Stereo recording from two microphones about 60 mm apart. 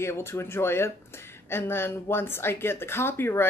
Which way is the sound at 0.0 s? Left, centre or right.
Left.